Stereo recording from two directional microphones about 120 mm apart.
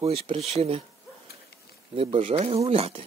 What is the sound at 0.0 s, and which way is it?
Speech, 55° right (ahead or behind).